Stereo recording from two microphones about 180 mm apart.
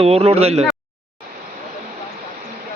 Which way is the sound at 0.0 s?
35° right (ahead or behind).